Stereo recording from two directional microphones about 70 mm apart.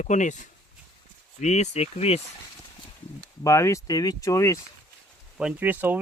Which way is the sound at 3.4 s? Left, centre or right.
Left.